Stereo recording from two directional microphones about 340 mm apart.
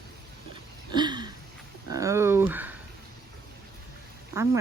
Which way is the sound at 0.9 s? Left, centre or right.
Centre.